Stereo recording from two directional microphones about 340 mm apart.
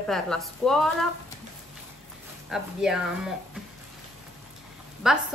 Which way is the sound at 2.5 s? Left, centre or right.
Centre.